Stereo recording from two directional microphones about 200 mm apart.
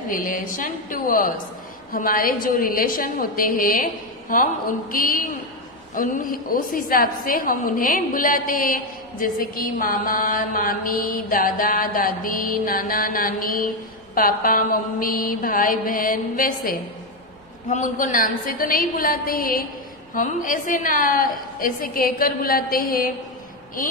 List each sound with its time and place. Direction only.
0.1 s a woman's voice: 45° left (ahead or behind)